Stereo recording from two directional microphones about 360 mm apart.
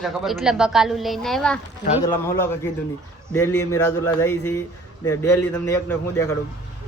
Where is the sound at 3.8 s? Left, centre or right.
Centre.